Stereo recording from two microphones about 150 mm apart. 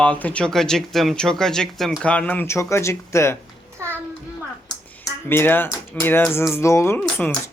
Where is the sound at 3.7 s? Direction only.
15° right (ahead or behind).